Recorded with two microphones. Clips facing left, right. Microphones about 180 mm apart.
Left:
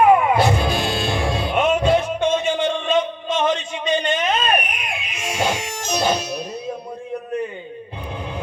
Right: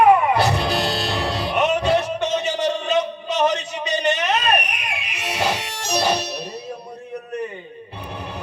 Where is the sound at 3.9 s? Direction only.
75° right (ahead or behind).